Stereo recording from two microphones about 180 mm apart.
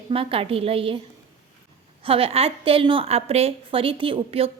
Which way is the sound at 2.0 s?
30° right (ahead or behind).